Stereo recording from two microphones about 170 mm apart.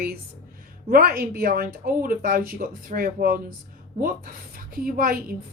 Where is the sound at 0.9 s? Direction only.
60° right (ahead or behind).